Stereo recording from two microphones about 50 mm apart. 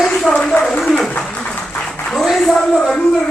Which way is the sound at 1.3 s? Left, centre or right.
Left.